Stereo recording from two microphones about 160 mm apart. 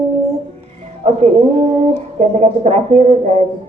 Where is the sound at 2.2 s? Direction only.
45° right (ahead or behind).